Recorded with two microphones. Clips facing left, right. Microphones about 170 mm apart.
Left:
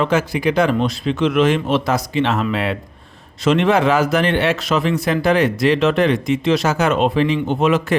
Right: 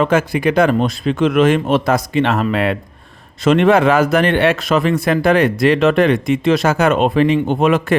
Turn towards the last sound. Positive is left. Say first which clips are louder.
# right 2 dB
turn(degrees=-55)  # may be behind; listen again after turning